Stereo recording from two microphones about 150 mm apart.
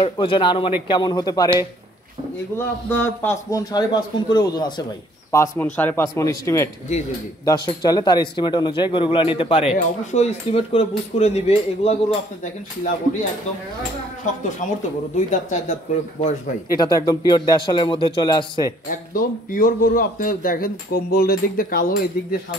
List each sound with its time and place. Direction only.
0.0 s a man's voice: 35° left (ahead or behind)
2.5 s a man's voice: 15° left (ahead or behind)
5.3 s a man's voice: 15° left (ahead or behind); by 11.9 s 45° left (ahead or behind)
14.6 s speech: 60° left (ahead or behind)
16.7 s a man's voice: 25° left (ahead or behind)
18.9 s a man's voice: 65° left (ahead or behind)